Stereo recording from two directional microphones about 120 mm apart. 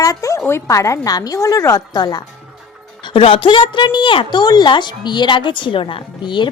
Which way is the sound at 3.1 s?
45° left (ahead or behind).